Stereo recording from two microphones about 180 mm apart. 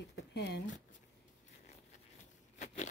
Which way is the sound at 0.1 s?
70° left (ahead or behind).